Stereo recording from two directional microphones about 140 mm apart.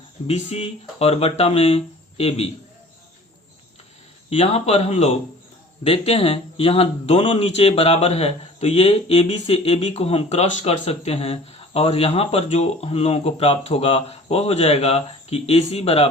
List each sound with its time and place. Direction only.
0.3 s speech: 50° left (ahead or behind)
4.3 s speech: 45° left (ahead or behind)